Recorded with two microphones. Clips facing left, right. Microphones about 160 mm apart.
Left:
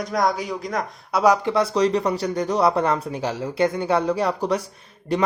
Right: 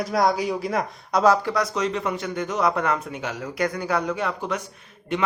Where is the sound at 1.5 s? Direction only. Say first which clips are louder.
Left 5 dB; 30° left (ahead or behind).